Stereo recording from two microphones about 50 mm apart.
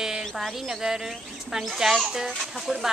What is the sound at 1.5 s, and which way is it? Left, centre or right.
Music, centre.